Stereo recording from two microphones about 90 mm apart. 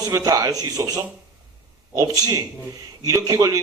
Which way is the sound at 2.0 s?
35° right (ahead or behind).